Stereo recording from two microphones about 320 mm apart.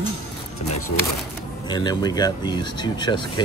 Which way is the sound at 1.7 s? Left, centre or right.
Centre.